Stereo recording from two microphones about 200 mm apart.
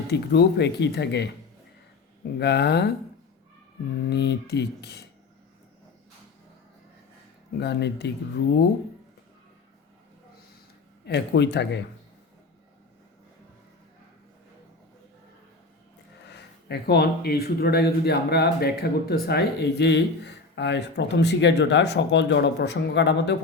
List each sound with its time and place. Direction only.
0.1 s speech: 55° left (ahead or behind)
2.4 s speech: 55° left (ahead or behind)
4.1 s speech: 55° left (ahead or behind)
7.6 s speech: 55° left (ahead or behind)
11.0 s speech: 60° left (ahead or behind)
16.2 s speech: 60° left (ahead or behind)